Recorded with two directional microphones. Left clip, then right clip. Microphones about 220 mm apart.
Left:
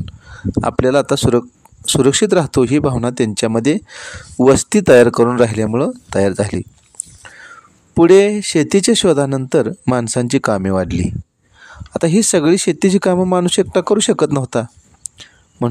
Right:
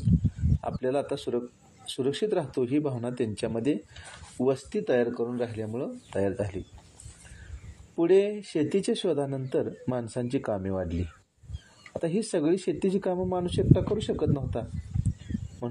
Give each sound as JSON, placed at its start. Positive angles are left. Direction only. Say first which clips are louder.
{"t": 0.6, "sound": "speech", "louder": "left 16 dB", "side_deg": 35}
{"t": 7.9, "sound": "speech", "louder": "left 14 dB", "side_deg": 40}